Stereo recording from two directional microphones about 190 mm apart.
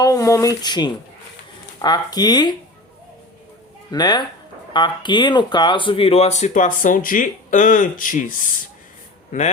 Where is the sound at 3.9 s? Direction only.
20° left (ahead or behind).